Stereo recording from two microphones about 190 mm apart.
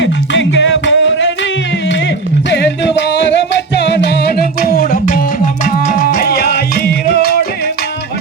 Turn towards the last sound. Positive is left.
turn(degrees=55)  # may be behind; listen again after turning